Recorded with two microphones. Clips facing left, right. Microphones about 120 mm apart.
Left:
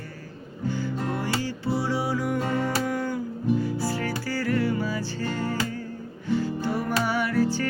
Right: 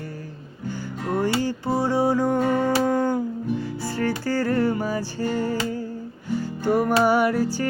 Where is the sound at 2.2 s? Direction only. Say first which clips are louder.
Right 5 dB; 25° right (ahead or behind).